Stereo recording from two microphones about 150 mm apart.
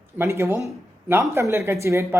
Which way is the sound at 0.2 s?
15° right (ahead or behind).